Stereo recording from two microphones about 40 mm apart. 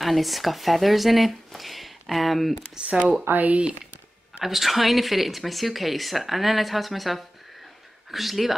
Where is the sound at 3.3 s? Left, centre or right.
Right.